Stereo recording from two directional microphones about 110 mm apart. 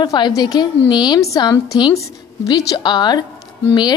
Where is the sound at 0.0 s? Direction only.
40° left (ahead or behind).